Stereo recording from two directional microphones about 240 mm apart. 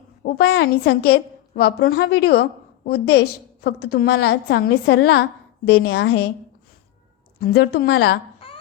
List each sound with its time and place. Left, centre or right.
0.3 s a woman's voice: left
7.3 s a woman's voice: left
8.4 s a sound: left